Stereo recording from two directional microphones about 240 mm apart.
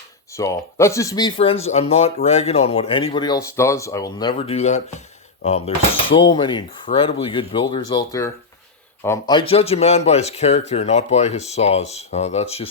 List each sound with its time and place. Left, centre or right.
0.3 s speech: centre